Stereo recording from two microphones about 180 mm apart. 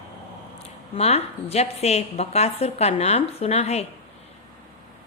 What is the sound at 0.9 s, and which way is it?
A woman's voice, 35° left (ahead or behind).